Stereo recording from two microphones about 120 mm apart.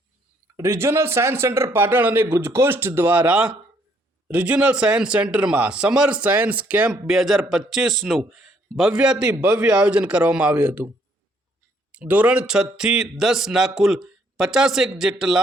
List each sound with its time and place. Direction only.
0.5 s a man's voice: 25° right (ahead or behind)
11.9 s a man's voice: 10° right (ahead or behind)